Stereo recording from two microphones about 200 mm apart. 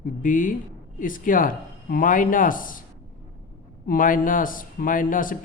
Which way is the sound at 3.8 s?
45° left (ahead or behind).